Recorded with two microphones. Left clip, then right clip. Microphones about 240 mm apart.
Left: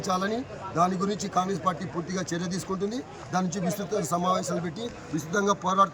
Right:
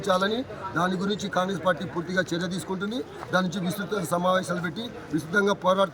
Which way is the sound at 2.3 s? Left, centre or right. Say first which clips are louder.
Right 1 dB; left.